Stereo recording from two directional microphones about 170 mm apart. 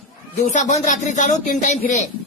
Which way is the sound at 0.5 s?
45° left (ahead or behind).